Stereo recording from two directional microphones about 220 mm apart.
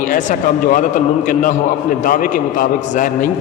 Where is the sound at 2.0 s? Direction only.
40° left (ahead or behind).